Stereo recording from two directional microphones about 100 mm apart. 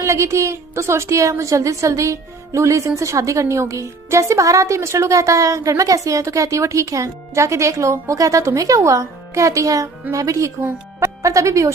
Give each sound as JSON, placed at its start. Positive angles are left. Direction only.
{"t": 0.0, "sound": "a woman's voice", "side_deg": -30}